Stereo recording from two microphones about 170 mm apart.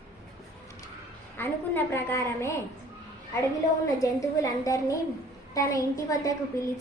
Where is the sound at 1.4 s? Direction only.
10° left (ahead or behind).